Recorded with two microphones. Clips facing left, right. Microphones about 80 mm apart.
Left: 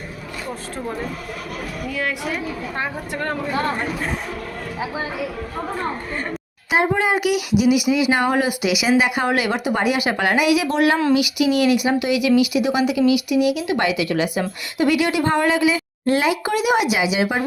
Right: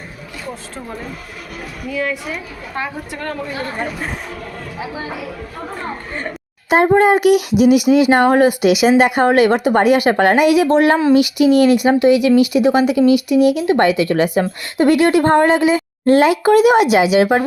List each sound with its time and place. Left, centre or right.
1.9 s a woman's voice: left
2.7 s a woman's voice: left
7.0 s a woman's voice: right